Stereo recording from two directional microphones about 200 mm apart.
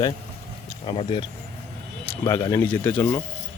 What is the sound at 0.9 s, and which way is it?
Speech, 25° left (ahead or behind).